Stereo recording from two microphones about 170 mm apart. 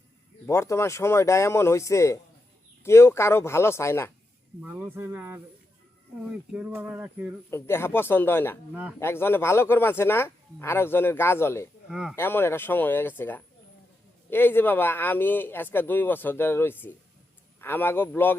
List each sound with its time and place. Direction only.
0.4 s speech: 15° left (ahead or behind)
4.6 s a sound: 10° right (ahead or behind)
7.5 s speech: 15° left (ahead or behind)
11.9 s speech: 5° right (ahead or behind)
12.1 s speech: 15° left (ahead or behind)